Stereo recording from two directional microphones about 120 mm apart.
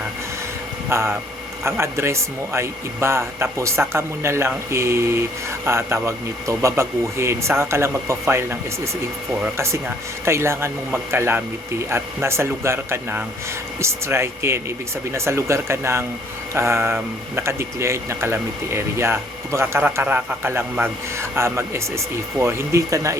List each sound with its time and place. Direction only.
0.9 s speech: 20° right (ahead or behind)